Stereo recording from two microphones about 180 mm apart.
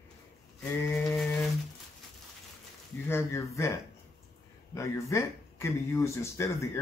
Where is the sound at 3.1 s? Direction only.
15° left (ahead or behind).